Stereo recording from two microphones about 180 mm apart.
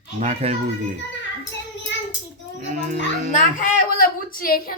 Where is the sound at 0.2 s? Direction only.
40° right (ahead or behind).